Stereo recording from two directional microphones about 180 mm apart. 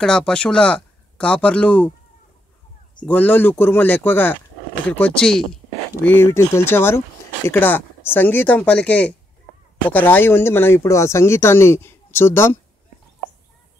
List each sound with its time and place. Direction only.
0.0 s speech: 5° left (ahead or behind)
3.1 s speech: 10° left (ahead or behind)
6.0 s speech: 15° left (ahead or behind)